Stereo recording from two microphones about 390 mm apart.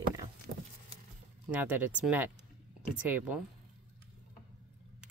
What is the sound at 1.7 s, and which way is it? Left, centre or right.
Mantra, centre.